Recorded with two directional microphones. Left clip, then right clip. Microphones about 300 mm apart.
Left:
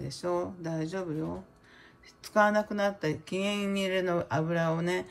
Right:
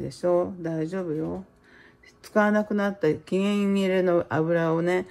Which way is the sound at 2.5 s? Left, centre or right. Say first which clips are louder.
Right 3 dB; centre.